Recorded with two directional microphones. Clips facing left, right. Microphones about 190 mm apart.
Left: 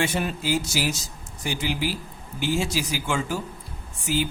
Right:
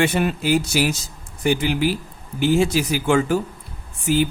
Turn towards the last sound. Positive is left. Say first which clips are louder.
# right 6 dB
turn(degrees=-55)  # may be behind; listen again after turning